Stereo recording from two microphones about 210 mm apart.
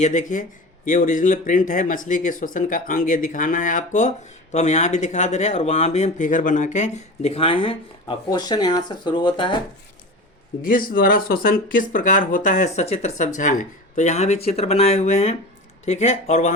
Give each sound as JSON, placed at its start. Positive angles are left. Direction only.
{"t": 0.0, "sound": "speech", "side_deg": 35}
{"t": 10.6, "sound": "speech", "side_deg": 40}